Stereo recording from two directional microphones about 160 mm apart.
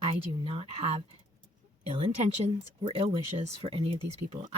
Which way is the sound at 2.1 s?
45° right (ahead or behind).